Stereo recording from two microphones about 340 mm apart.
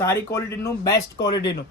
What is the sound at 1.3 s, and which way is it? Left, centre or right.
Speech, left.